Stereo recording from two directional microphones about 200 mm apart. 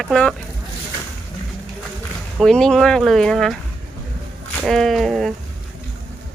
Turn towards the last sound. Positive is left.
turn(degrees=0)  # may be behind; listen again after turning